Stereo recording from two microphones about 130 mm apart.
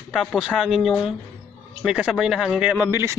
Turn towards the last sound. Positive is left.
turn(degrees=-20)  # may be behind; listen again after turning